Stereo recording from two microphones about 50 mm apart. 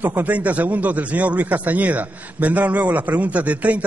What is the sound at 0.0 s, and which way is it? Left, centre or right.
A man's voice, right.